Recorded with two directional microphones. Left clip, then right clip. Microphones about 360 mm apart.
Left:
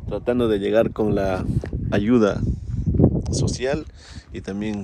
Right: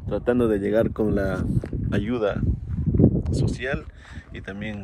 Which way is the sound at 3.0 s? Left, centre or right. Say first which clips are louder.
Left 2 dB; centre.